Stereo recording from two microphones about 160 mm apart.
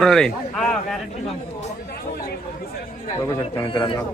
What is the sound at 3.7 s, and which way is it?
Speech, 30° left (ahead or behind).